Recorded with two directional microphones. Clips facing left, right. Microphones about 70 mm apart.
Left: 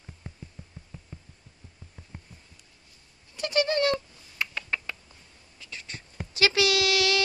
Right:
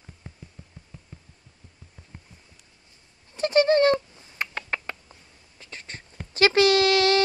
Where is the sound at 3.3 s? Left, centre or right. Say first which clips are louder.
Right 6 dB; right.